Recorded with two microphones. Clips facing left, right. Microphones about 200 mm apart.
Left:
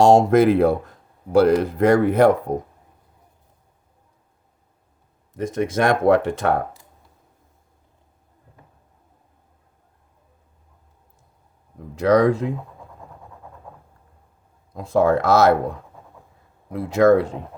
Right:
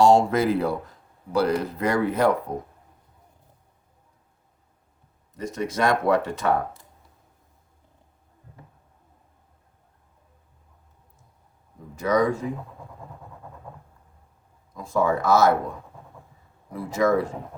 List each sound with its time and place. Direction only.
0.2 s speech: 50° left (ahead or behind)
5.4 s speech: 55° left (ahead or behind)
11.9 s speech: 70° left (ahead or behind)
14.7 s speech: 65° left (ahead or behind)
16.7 s speech: 65° left (ahead or behind)